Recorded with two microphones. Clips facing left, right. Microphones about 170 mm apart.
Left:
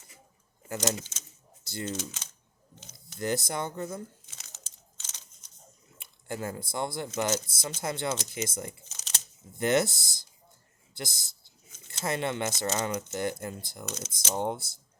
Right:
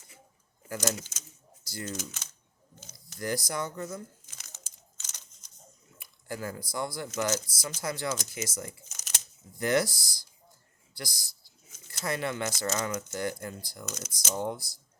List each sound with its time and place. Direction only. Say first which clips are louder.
0.7 s speech: left 1 dB; 25° left (ahead or behind)
6.0 s speech: left 2 dB; 25° left (ahead or behind)